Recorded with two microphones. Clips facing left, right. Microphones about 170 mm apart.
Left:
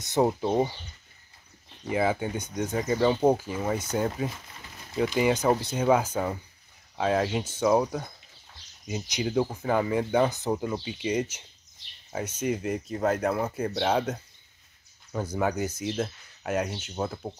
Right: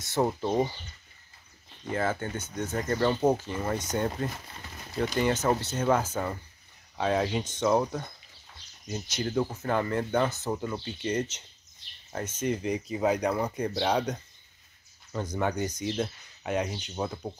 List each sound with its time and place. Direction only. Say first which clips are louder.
0.0 s speech: left 3 dB; 15° left (ahead or behind)
1.9 s speech: left 3 dB; 10° left (ahead or behind)